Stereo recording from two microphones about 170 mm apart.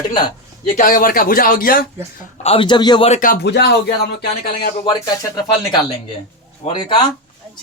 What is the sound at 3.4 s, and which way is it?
Speech, 80° left.